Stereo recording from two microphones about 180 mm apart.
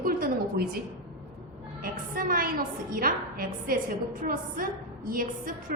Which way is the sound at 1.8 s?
50° right (ahead or behind).